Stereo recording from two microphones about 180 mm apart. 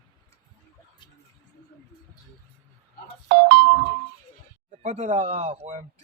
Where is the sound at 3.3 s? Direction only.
60° right (ahead or behind).